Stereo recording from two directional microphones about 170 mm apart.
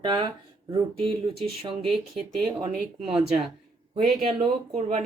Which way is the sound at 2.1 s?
5° left (ahead or behind).